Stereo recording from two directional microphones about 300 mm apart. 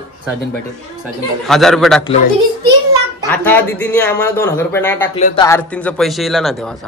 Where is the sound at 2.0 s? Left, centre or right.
Left.